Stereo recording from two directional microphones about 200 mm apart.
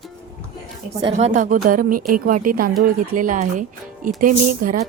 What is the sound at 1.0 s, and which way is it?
Speech, 35° right (ahead or behind).